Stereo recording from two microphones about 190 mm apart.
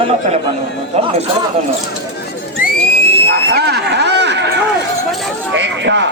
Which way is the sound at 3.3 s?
60° right (ahead or behind).